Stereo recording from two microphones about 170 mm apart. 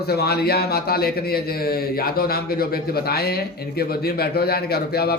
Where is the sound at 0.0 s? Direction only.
70° left (ahead or behind).